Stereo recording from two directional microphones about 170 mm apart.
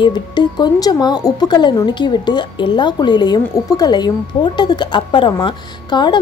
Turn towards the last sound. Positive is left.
turn(degrees=25)  # may be behind; listen again after turning